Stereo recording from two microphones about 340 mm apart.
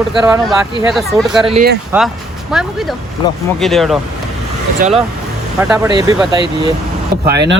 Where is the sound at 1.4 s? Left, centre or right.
Centre.